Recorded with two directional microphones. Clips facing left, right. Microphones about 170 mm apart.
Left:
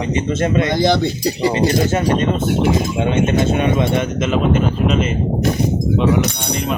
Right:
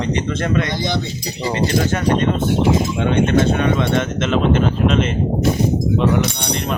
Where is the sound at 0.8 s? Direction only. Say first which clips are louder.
Left 7 dB; 65° left (ahead or behind).